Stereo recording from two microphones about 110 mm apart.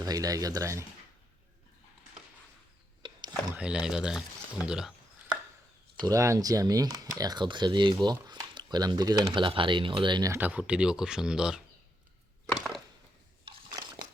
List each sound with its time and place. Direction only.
0.0 s speech: 35° right (ahead or behind)
3.0 s a sound: 45° right (ahead or behind)
3.5 s speech: 10° right (ahead or behind)
6.0 s speech: 30° right (ahead or behind)
8.0 s a sound: 35° right (ahead or behind)
8.5 s speech: 40° right (ahead or behind)
10.4 s speech: 10° right (ahead or behind)
13.4 s biting: 40° right (ahead or behind)